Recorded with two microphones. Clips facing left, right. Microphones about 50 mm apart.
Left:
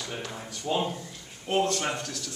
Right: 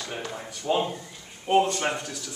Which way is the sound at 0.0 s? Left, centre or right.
Centre.